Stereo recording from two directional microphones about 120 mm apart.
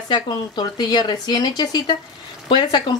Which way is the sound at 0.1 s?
35° left (ahead or behind).